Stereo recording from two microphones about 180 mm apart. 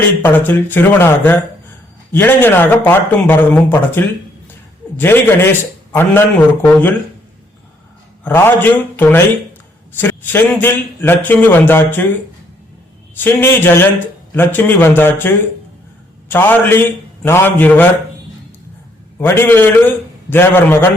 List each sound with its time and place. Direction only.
0.2 s a man's voice: 10° left (ahead or behind)
8.2 s a man's voice: 10° left (ahead or behind)
13.1 s a man's voice: 10° left (ahead or behind)
19.2 s a man's voice: 10° left (ahead or behind)